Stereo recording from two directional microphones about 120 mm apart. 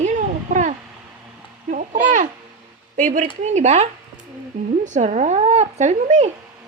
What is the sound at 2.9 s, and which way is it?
Speech, 90° right.